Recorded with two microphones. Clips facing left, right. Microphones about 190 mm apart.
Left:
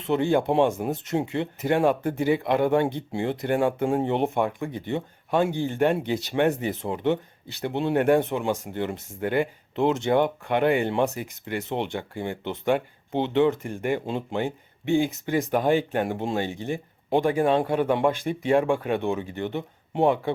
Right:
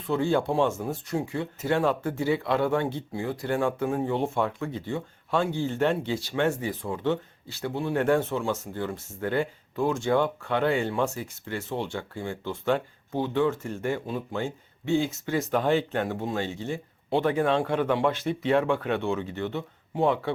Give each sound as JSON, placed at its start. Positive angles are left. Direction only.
{"t": 0.0, "sound": "speech", "side_deg": 20}